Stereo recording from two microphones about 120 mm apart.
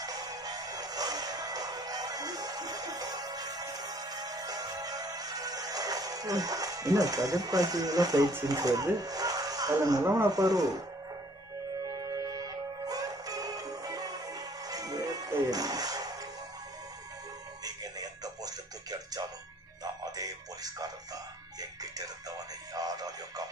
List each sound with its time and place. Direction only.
0.0 s music: 30° right (ahead or behind)
8.5 s speech: 30° right (ahead or behind)
11.9 s music: 30° right (ahead or behind)
17.6 s music: 30° right (ahead or behind)